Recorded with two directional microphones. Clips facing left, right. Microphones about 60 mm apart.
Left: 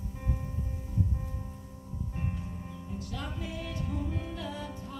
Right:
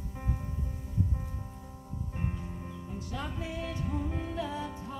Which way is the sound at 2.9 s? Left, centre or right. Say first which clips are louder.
Right 1 dB; centre.